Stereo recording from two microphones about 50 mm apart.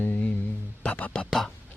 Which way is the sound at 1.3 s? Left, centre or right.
Centre.